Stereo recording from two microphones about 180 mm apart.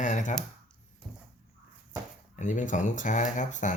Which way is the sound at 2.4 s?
45° left (ahead or behind).